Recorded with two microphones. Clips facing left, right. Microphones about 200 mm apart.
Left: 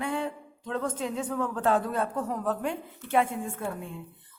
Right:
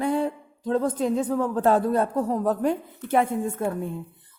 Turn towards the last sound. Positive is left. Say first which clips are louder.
# right 7 dB
turn(degrees=-40)  # may be behind; listen again after turning